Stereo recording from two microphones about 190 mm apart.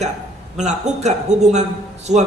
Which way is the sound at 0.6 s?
35° right (ahead or behind).